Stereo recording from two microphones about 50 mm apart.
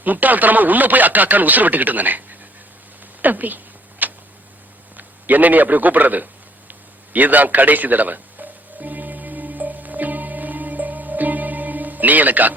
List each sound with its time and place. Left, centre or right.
0.0 s speech: right
3.2 s a sound: right
4.9 s a man's voice: right
7.1 s music: right